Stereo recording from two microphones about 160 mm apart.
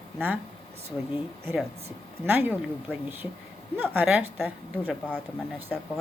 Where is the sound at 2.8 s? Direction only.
10° right (ahead or behind).